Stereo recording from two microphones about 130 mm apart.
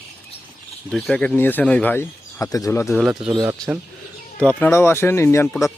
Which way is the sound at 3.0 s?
5° right (ahead or behind).